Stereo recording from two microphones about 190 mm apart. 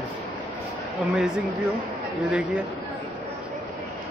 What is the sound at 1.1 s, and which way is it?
Speech, 5° right (ahead or behind).